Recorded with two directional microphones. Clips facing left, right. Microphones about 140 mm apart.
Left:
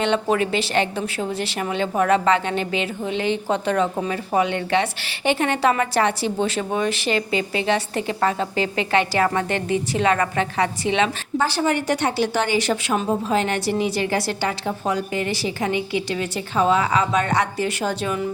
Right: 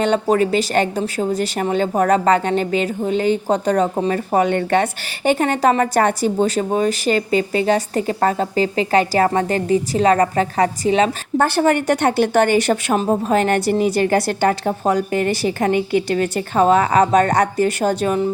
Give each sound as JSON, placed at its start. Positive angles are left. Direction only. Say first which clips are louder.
{"t": 0.0, "sound": "a woman's voice", "louder": "right 4 dB", "side_deg": -40}
{"t": 11.3, "sound": "a woman's voice", "louder": "right 5 dB", "side_deg": -55}